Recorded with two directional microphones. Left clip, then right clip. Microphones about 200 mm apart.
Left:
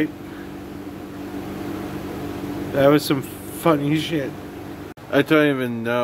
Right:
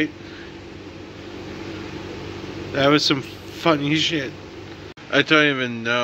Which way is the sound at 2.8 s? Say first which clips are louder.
Left 1 dB; 15° left (ahead or behind).